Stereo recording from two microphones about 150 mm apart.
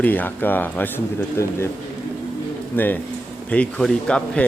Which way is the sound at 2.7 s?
10° left (ahead or behind).